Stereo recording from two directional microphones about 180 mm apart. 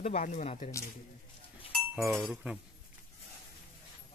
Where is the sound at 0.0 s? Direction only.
40° left (ahead or behind).